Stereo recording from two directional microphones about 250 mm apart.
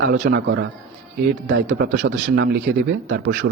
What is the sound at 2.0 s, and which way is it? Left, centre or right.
Speech, right.